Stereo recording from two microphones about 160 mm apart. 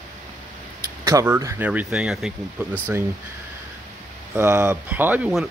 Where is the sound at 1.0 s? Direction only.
15° right (ahead or behind).